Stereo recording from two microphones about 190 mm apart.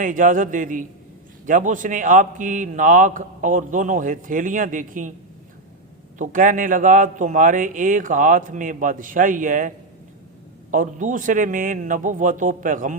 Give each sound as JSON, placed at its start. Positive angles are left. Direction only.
{"t": 0.0, "sound": "a man's voice", "side_deg": -45}
{"t": 6.1, "sound": "a man's voice", "side_deg": -45}